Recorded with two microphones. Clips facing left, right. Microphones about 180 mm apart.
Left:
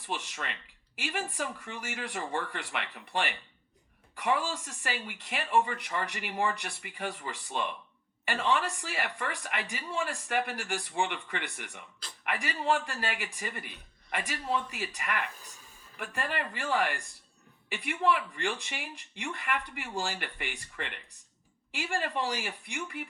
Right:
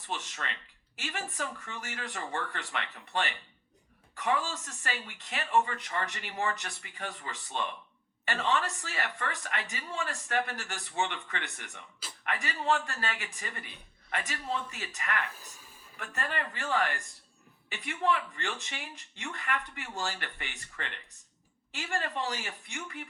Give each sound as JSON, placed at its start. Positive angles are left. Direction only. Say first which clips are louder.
{"t": 0.0, "sound": "a woman's voice", "louder": "left 1 dB", "side_deg": 10}